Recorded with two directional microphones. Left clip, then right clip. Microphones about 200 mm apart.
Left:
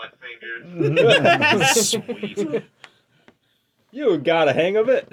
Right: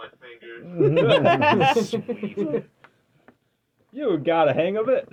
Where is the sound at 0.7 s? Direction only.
45° right (ahead or behind).